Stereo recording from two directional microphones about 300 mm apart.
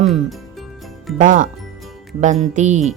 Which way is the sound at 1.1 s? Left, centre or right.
Right.